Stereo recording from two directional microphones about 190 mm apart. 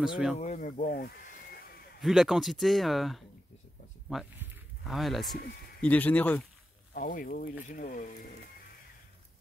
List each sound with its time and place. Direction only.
0.0 s speech: centre (ahead or behind)
0.4 s speech: 40° left (ahead or behind)
2.0 s speech: centre (ahead or behind)
4.1 s a sound: centre (ahead or behind)
5.8 s speech: 10° left (ahead or behind)
6.9 s speech: 45° left (ahead or behind)